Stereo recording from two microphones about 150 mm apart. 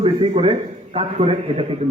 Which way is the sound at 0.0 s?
40° right (ahead or behind).